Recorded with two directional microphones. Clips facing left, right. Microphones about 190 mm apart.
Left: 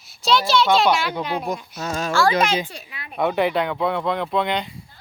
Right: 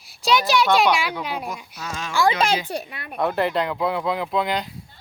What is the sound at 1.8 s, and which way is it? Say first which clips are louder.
Speech: left 6 dB; 40° left (ahead or behind).